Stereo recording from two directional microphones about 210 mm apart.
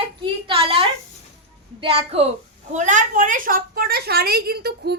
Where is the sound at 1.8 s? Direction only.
30° right (ahead or behind).